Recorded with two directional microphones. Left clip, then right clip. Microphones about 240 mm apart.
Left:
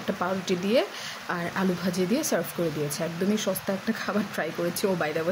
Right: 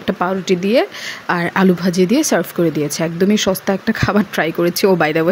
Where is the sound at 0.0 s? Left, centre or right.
Right.